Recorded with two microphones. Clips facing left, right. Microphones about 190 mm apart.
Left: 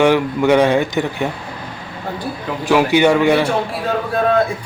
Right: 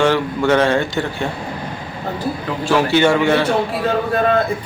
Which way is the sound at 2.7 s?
15° left (ahead or behind).